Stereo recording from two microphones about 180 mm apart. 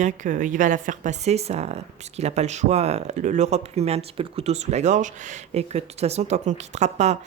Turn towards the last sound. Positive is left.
turn(degrees=-40)  # may be behind; listen again after turning